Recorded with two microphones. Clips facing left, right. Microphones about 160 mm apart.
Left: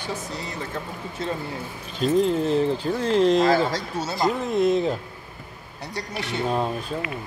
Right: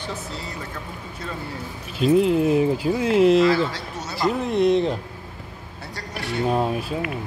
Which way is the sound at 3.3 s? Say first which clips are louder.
Right 1 dB; 40° left (ahead or behind).